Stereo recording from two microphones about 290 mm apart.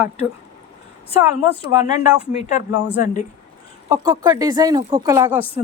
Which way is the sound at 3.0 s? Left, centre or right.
Left.